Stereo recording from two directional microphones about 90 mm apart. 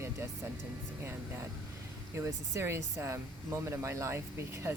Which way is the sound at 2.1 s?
30° right (ahead or behind).